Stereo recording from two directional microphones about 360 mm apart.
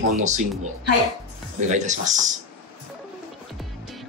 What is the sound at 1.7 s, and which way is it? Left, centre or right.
Speech, centre.